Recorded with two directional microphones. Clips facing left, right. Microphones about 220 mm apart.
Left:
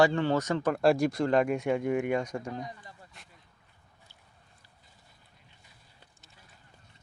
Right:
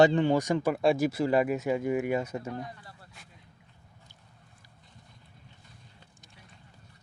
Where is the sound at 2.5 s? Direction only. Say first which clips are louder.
Even; 15° left (ahead or behind).